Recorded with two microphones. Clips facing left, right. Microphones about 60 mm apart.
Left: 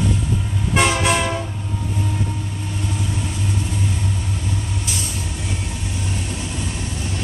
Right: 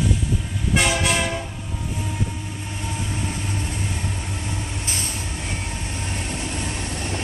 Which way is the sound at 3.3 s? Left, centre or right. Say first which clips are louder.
Left 3 dB; right.